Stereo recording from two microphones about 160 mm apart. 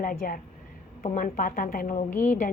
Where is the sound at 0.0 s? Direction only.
60° left (ahead or behind).